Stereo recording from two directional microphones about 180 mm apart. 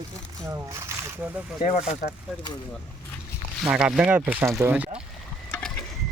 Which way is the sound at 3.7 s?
5° right (ahead or behind).